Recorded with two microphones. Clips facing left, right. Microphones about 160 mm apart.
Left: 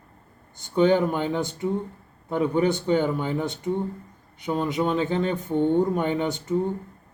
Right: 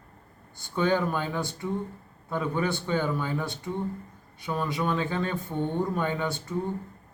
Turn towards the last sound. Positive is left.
turn(degrees=20)  # may be behind; listen again after turning